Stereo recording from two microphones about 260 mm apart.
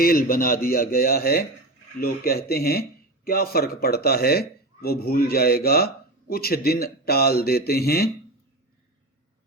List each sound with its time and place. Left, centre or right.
0.0 s speech: left